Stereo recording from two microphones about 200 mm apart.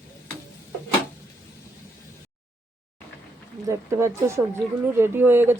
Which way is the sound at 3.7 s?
15° right (ahead or behind).